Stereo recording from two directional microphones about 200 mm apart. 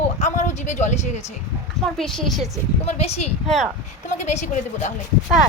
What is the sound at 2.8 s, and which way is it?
Speech, 30° left (ahead or behind).